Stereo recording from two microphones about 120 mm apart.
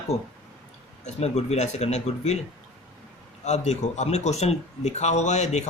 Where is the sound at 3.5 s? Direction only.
70° left (ahead or behind).